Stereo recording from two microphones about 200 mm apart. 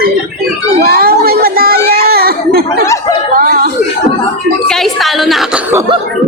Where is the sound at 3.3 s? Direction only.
45° right (ahead or behind).